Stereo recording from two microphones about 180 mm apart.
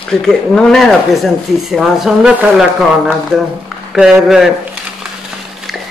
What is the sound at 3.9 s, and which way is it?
Speech, 5° right (ahead or behind).